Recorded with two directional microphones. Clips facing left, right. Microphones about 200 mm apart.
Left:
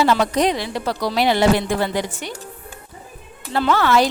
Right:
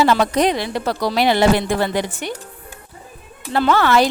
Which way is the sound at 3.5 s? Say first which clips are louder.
Right 2 dB; 60° right (ahead or behind).